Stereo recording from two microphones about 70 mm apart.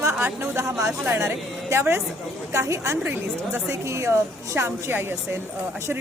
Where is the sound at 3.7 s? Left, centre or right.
Right.